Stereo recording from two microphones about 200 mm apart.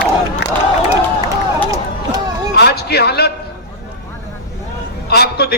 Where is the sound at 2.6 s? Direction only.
55° left (ahead or behind).